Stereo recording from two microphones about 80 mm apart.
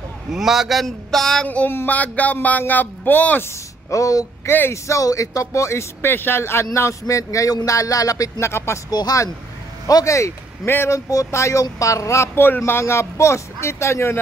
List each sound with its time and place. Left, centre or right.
0.3 s a man's voice: centre
1.5 s a sound: centre
1.8 s a man's voice: centre
3.9 s a sound: left
4.5 s speech: left
8.5 s speech: left
8.9 s speech: left
9.8 s speech: left
11.1 s speech: left